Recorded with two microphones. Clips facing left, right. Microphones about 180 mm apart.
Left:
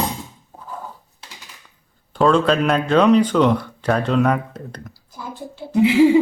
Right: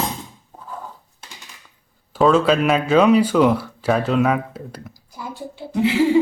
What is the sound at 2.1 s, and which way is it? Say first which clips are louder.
Speech: right 1 dB; 5° right (ahead or behind).